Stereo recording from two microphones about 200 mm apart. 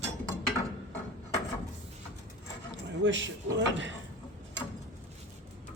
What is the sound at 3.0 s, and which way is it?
Speech, 65° right (ahead or behind).